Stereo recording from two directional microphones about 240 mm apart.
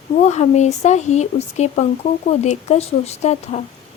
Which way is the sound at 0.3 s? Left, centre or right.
Left.